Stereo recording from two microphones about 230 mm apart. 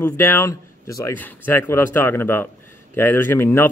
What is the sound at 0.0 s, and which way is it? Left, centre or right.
Speech, centre.